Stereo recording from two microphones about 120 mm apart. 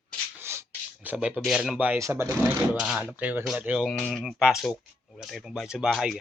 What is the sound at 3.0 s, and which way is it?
Speech, 15° right (ahead or behind).